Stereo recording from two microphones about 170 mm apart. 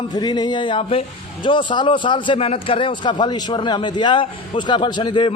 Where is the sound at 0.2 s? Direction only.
25° left (ahead or behind).